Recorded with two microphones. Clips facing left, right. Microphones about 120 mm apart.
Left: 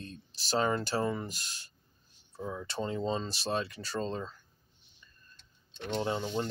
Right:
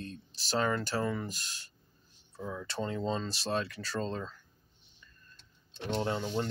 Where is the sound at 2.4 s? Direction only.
10° left (ahead or behind).